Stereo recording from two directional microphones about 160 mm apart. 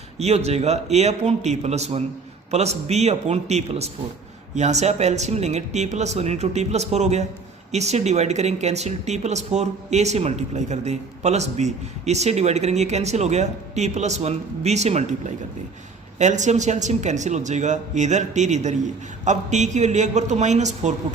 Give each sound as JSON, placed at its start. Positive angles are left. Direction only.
{"t": 0.2, "sound": "speech", "side_deg": -40}
{"t": 16.1, "sound": "speech", "side_deg": -50}